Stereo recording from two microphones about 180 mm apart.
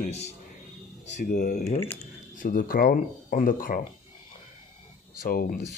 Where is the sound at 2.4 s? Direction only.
50° left (ahead or behind).